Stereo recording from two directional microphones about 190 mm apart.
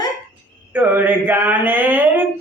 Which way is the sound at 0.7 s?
10° right (ahead or behind).